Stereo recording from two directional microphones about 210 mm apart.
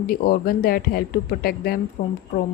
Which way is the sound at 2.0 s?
35° left (ahead or behind).